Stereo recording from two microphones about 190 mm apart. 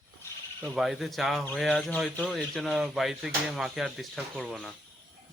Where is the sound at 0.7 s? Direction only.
Centre (ahead or behind).